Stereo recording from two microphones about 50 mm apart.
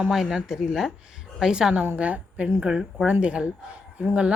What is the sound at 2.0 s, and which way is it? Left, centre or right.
Speech, right.